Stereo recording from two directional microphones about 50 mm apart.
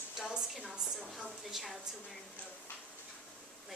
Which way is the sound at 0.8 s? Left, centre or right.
Centre.